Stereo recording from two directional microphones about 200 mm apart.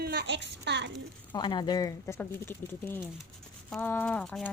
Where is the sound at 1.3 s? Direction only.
20° left (ahead or behind); by 4.5 s 5° left (ahead or behind).